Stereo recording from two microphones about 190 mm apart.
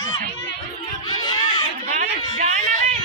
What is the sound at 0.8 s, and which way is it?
Speech, 25° left (ahead or behind).